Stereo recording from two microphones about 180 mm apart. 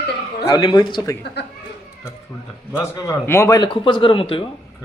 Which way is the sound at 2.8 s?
15° left (ahead or behind).